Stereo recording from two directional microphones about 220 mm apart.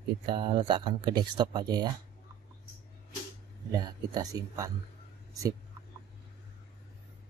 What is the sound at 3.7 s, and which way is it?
Speech, 20° right (ahead or behind).